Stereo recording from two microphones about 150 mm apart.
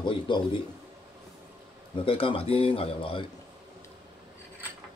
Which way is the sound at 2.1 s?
35° left (ahead or behind).